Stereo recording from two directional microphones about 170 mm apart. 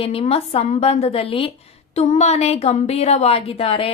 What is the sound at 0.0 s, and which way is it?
A woman's voice, 35° left (ahead or behind).